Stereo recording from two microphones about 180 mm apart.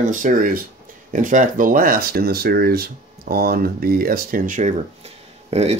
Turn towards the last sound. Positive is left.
turn(degrees=-35)  # may be behind; listen again after turning